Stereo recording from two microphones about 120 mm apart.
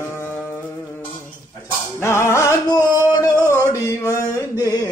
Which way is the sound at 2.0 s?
20° left (ahead or behind).